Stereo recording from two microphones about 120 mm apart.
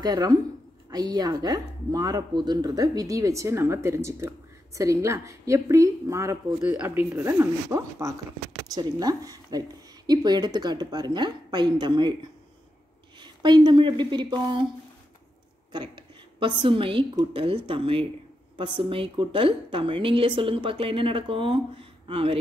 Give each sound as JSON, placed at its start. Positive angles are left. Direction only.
{"t": 0.0, "sound": "a woman's voice", "side_deg": -35}
{"t": 16.3, "sound": "a woman's voice", "side_deg": -45}